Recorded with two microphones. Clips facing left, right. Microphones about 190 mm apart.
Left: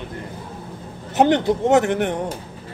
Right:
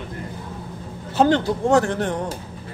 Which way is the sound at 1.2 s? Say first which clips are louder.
Left 1 dB; 20° left (ahead or behind).